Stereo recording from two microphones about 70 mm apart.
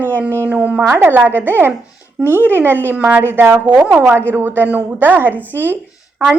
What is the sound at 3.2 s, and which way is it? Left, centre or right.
Speech, right.